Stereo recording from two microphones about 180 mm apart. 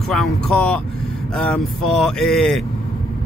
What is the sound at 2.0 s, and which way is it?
Speech, 5° left (ahead or behind).